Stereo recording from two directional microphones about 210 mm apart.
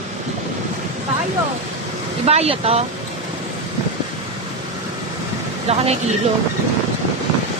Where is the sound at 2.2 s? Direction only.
30° right (ahead or behind).